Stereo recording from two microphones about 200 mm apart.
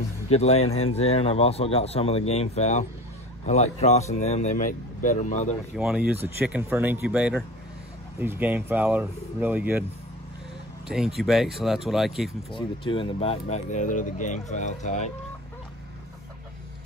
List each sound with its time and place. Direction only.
0.3 s speech: 30° left (ahead or behind)
5.8 s speech: 5° right (ahead or behind)
10.9 s speech: centre (ahead or behind)
12.5 s speech: 25° left (ahead or behind)